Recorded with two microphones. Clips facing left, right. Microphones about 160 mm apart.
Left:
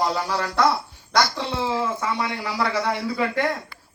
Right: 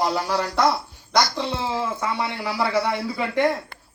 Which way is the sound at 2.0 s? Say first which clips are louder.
Even; 20° right (ahead or behind).